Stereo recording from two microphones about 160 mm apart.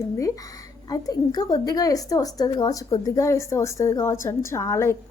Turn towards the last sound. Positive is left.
turn(degrees=20)  # may be behind; listen again after turning